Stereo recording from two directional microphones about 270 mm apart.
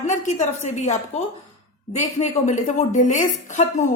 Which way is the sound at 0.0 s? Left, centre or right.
Left.